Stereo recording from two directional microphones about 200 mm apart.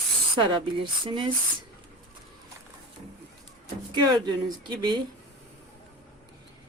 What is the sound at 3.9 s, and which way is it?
Speech, 25° right (ahead or behind).